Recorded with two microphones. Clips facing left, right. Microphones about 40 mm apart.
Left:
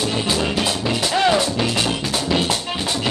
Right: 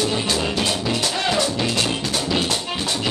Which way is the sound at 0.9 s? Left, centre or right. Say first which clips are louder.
Left 4 dB; centre.